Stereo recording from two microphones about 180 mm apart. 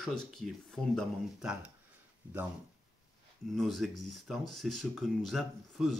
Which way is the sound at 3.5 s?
Centre (ahead or behind).